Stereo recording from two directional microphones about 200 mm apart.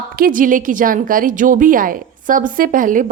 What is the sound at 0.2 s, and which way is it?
A woman's voice, 40° right (ahead or behind).